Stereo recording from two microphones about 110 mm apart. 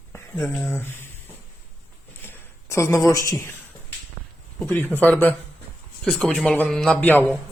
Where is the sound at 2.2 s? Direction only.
25° left (ahead or behind).